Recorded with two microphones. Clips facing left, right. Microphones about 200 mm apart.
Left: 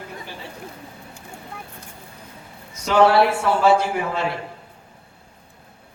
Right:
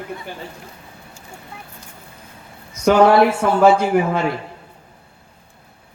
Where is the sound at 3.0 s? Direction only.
45° right (ahead or behind).